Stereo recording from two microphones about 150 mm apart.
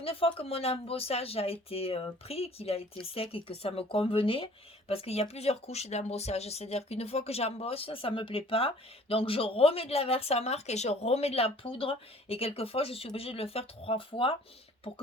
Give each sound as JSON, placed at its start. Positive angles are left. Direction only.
{"t": 0.0, "sound": "speech", "side_deg": 40}